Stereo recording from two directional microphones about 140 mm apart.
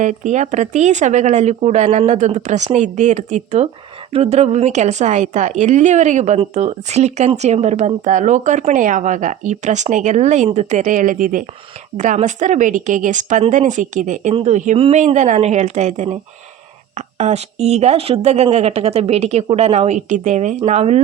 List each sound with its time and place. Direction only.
0.0 s speech: 60° right (ahead or behind)
11.9 s speech: 60° right (ahead or behind)
17.2 s a woman's voice: 50° right (ahead or behind)